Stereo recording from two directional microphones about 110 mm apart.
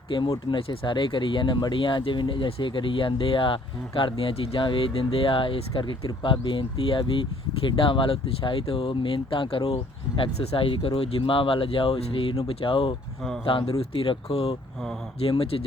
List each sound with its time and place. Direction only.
0.1 s speech: 50° left (ahead or behind)